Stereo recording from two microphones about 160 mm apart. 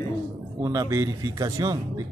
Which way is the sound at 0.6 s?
20° right (ahead or behind).